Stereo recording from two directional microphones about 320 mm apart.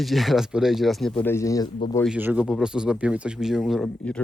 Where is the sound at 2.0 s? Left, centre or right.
Centre.